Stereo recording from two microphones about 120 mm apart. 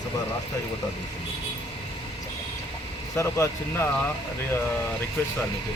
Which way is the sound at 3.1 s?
20° left (ahead or behind).